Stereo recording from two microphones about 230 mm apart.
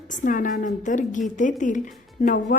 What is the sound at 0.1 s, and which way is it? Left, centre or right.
A woman's voice, left.